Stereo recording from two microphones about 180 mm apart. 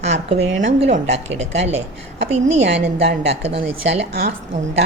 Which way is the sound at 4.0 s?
65° right (ahead or behind).